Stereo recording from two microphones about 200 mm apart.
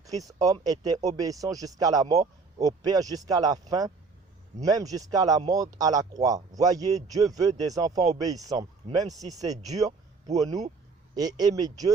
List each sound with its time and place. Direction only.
0.3 s speech: 20° right (ahead or behind)